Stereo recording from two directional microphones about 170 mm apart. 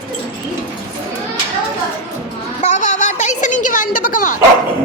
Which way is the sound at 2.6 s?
45° left (ahead or behind).